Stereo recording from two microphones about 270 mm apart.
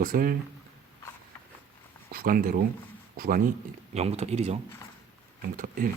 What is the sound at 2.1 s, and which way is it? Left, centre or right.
Speech, right.